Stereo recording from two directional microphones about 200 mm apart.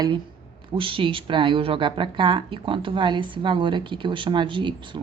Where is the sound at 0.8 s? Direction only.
25° right (ahead or behind).